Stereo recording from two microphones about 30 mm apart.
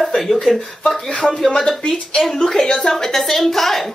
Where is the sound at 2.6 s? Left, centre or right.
Left.